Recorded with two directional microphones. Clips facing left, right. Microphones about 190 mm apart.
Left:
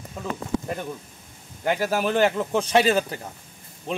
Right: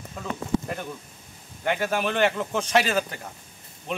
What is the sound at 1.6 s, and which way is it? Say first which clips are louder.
Speech: left 2 dB; 35° left (ahead or behind).